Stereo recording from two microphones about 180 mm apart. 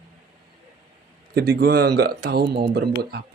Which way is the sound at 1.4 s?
60° right (ahead or behind).